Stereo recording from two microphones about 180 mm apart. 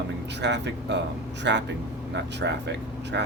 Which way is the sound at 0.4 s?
75° right (ahead or behind).